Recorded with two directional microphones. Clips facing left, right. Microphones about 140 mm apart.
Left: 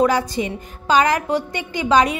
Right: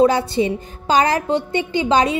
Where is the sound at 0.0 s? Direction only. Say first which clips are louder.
Right 3 dB; 30° right (ahead or behind).